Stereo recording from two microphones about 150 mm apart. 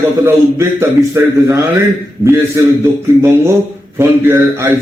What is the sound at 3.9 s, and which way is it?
Speech, 15° right (ahead or behind).